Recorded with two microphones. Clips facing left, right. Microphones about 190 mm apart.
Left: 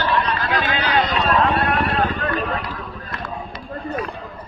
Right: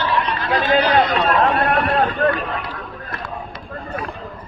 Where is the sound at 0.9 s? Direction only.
55° right (ahead or behind).